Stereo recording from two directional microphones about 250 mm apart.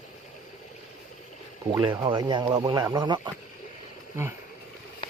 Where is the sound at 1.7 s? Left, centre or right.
Centre.